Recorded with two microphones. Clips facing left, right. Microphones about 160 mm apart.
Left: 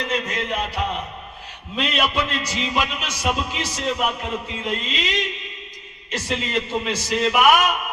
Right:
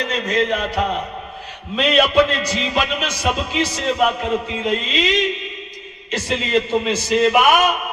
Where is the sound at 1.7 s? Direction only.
70° right (ahead or behind).